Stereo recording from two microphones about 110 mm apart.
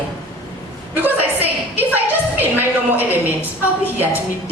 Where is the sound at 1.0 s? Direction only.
15° right (ahead or behind).